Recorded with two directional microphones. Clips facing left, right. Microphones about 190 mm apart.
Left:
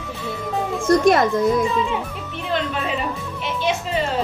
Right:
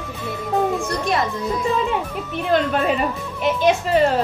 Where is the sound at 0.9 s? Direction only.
50° left (ahead or behind).